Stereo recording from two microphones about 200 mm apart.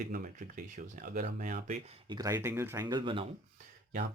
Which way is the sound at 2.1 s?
15° right (ahead or behind).